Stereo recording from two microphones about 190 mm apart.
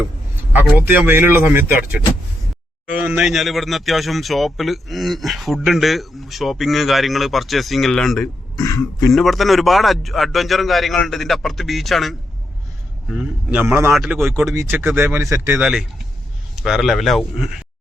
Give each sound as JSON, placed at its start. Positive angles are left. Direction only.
{"t": 0.8, "sound": "speech", "side_deg": -10}
{"t": 8.5, "sound": "speech", "side_deg": 15}
{"t": 9.1, "sound": "speech", "side_deg": 0}